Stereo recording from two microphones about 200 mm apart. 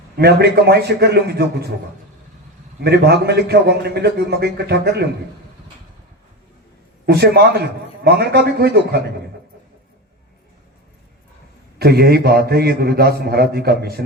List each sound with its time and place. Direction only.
0.2 s a man's voice: 50° right (ahead or behind)
2.8 s a man's voice: 55° right (ahead or behind)
7.0 s a man's voice: 50° right (ahead or behind)
11.8 s a man's voice: 50° right (ahead or behind)